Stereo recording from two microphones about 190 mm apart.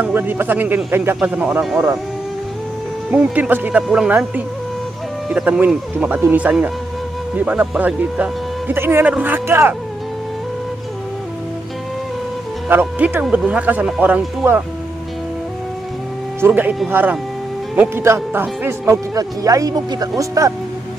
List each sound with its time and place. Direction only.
0.0 s speech: 10° right (ahead or behind)
3.1 s speech: 5° right (ahead or behind)
5.3 s speech: 5° right (ahead or behind)
12.6 s speech: 10° right (ahead or behind)
16.3 s speech: 10° right (ahead or behind)